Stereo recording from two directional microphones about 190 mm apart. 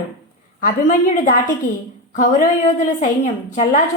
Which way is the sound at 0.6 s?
45° left (ahead or behind).